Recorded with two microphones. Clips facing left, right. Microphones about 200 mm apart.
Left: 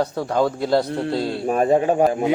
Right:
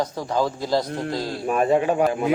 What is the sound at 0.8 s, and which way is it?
A man's voice, 30° left (ahead or behind).